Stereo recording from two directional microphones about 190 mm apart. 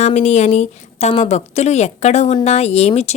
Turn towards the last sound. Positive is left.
turn(degrees=35)  # may be behind; listen again after turning